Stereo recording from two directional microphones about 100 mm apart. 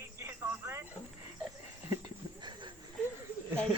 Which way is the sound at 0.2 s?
25° right (ahead or behind).